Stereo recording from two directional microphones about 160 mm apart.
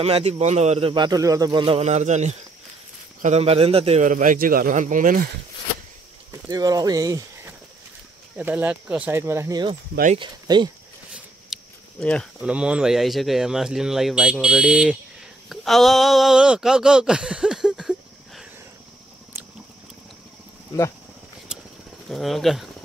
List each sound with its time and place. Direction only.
0.0 s a man's voice: 40° right (ahead or behind)
4.0 s speech: 55° right (ahead or behind)
6.3 s speech: 25° right (ahead or behind)
8.4 s speech: 10° right (ahead or behind); by 10.7 s 30° right (ahead or behind)
11.5 s a sound: centre (ahead or behind)
12.0 s speech: 5° left (ahead or behind)
12.4 s speech: 5° right (ahead or behind)
22.1 s speech: centre (ahead or behind)